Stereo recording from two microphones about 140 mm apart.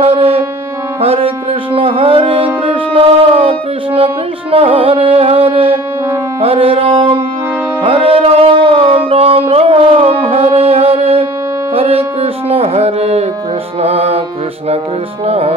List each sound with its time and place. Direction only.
0.0 s music: 45° right (ahead or behind)
15.2 s music: 45° right (ahead or behind)